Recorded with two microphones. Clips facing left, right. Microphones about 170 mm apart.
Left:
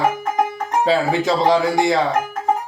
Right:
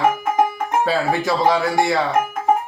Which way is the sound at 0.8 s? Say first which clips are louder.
Left 4 dB; 20° left (ahead or behind).